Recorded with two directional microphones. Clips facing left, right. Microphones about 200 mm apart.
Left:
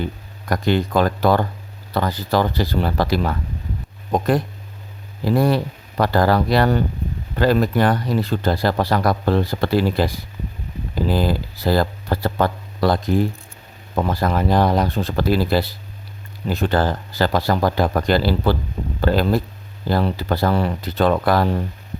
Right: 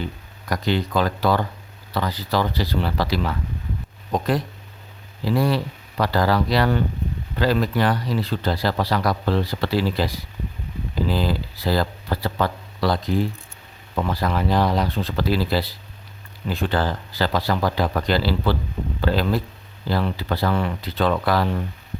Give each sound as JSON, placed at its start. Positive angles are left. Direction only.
{"t": 0.0, "sound": "speech", "side_deg": 50}